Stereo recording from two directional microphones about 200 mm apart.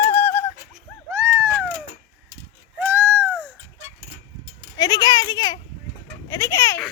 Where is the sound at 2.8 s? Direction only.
10° right (ahead or behind).